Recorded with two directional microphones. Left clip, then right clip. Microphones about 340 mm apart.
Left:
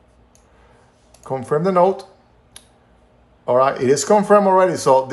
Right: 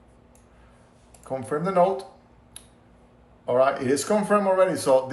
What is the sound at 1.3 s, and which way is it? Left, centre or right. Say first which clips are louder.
Speech: left 8 dB; left.